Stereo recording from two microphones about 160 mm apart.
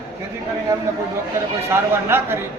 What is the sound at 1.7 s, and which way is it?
Speech, 15° right (ahead or behind).